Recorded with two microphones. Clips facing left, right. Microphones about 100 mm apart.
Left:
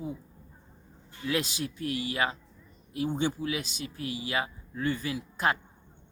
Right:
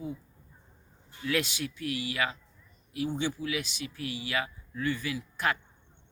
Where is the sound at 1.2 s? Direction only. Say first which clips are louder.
Even; 30° left (ahead or behind).